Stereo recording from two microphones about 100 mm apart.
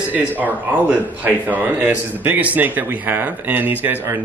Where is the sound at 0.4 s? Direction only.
15° right (ahead or behind).